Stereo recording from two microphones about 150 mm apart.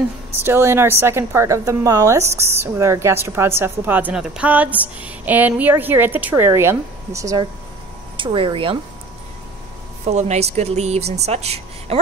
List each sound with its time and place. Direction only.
0.3 s a woman's voice: 15° right (ahead or behind)
8.2 s speech: 30° right (ahead or behind)
10.0 s a woman's voice: 50° right (ahead or behind)